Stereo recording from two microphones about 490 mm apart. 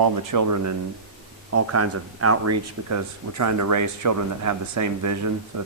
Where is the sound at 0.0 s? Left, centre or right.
Right.